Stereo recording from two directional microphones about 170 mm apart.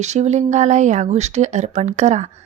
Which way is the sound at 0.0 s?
40° right (ahead or behind).